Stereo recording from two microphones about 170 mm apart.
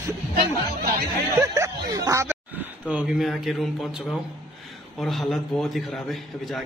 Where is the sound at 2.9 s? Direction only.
5° right (ahead or behind).